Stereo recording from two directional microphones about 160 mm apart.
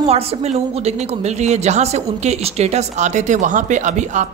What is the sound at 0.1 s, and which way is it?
A man's voice, 40° right (ahead or behind).